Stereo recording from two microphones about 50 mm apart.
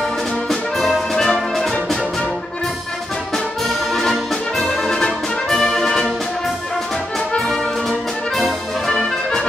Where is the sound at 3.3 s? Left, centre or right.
Centre.